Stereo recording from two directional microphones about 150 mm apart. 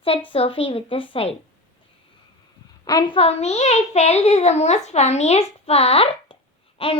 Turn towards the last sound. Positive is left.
turn(degrees=40)  # may be behind; listen again after turning